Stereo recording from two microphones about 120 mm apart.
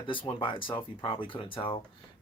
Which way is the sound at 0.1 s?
45° left (ahead or behind).